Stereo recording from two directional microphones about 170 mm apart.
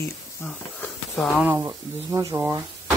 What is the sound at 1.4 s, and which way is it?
Speech, 10° right (ahead or behind).